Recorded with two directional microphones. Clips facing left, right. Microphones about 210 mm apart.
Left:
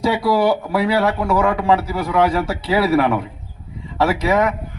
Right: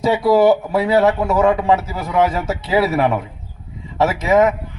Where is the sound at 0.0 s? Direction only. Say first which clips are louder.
Right 3 dB; 20° right (ahead or behind).